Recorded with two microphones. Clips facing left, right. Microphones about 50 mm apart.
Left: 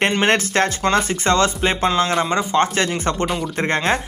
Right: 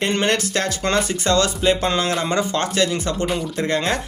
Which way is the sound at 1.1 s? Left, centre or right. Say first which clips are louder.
Left 2 dB; left.